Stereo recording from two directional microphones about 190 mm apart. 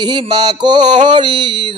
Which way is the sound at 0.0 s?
25° right (ahead or behind).